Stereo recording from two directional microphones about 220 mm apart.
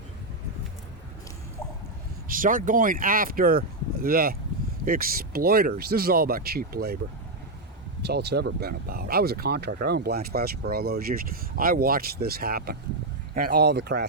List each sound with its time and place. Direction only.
2.2 s speech: 40° right (ahead or behind)
8.0 s speech: 50° right (ahead or behind)